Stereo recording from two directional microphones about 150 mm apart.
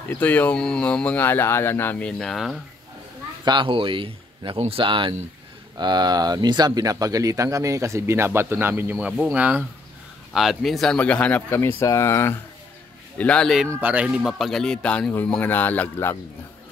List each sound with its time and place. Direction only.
0.1 s speech: 10° left (ahead or behind)
3.4 s a man's voice: 35° right (ahead or behind); by 13.7 s 5° left (ahead or behind)
13.7 s speech: 10° right (ahead or behind); by 16.2 s 15° left (ahead or behind)